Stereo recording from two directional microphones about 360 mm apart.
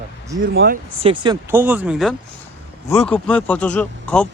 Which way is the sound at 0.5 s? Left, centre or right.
Right.